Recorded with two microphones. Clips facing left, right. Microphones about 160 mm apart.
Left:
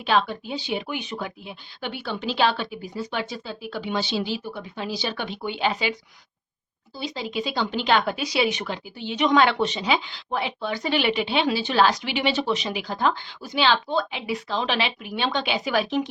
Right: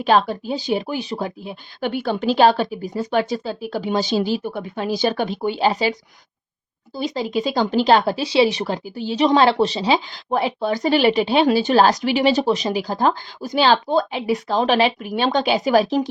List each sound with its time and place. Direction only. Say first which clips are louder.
0.0 s speech: right 5 dB; 45° right (ahead or behind)